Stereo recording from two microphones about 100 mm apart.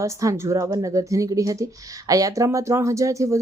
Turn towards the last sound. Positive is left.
turn(degrees=-30)  # may be behind; listen again after turning